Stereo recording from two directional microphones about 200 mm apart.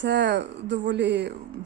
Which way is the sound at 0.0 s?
60° right (ahead or behind).